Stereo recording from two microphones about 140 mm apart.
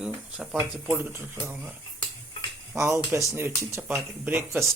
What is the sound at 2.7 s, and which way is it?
Speech, 20° right (ahead or behind).